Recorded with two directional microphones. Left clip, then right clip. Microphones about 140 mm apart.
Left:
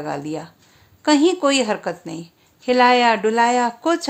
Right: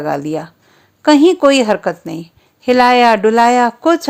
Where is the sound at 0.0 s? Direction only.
50° right (ahead or behind).